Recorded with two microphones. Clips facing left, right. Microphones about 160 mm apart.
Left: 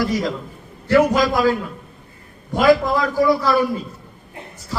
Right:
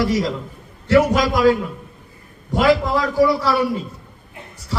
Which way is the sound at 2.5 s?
Centre (ahead or behind).